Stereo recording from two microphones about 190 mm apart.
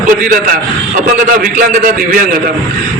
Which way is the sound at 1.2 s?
45° right (ahead or behind).